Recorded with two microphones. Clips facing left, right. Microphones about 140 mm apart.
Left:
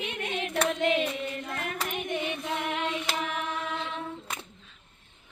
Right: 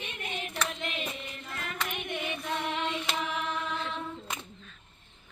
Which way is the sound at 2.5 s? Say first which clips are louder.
Even; 10° left (ahead or behind).